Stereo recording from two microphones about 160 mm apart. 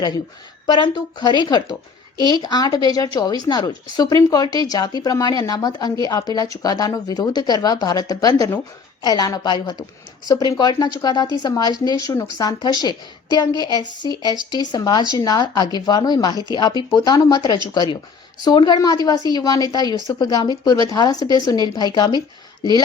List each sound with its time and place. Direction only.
0.7 s speech: 30° left (ahead or behind)